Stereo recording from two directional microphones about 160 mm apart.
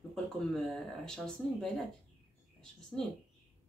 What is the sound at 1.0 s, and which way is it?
Speech, 5° left (ahead or behind).